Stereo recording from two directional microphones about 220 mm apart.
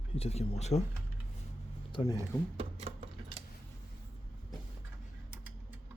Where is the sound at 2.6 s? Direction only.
25° right (ahead or behind).